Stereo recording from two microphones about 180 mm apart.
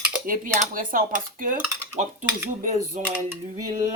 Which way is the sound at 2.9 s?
45° right (ahead or behind).